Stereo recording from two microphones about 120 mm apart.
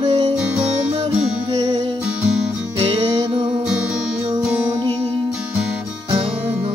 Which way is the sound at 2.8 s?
55° right (ahead or behind).